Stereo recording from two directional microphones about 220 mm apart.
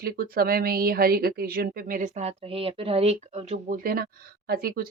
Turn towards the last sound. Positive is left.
turn(degrees=-40)  # may be behind; listen again after turning